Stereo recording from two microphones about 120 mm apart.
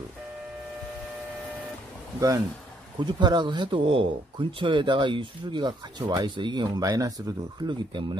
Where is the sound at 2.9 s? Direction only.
40° right (ahead or behind).